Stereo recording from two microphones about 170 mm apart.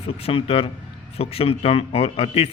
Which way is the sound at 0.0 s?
35° left (ahead or behind).